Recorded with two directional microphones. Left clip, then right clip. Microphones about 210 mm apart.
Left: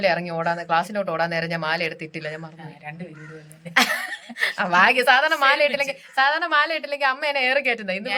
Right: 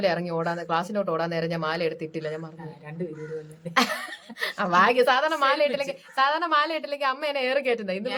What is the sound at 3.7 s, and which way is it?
A woman's voice, centre (ahead or behind).